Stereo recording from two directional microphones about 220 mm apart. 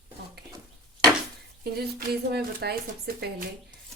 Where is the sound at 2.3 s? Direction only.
45° right (ahead or behind).